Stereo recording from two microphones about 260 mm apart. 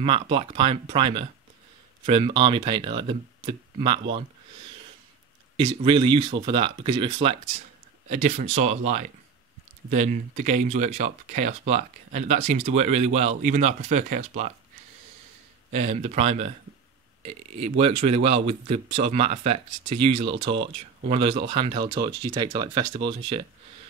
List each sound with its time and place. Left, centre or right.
0.0 s speech: right
5.9 s speech: centre
15.7 s speech: right
17.6 s speech: right
19.8 s speech: right
21.1 s speech: centre